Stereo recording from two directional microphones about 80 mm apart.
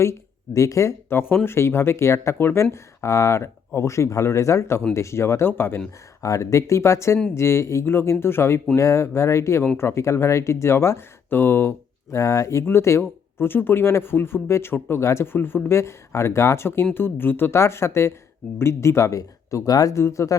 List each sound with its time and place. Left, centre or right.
0.0 s speech: left
6.2 s speech: left